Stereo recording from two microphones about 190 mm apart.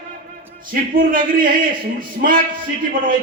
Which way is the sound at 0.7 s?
45° right (ahead or behind).